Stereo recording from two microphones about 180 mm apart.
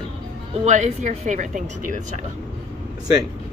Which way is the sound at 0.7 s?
40° right (ahead or behind).